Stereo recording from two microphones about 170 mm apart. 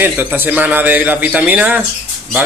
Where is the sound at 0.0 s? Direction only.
10° right (ahead or behind).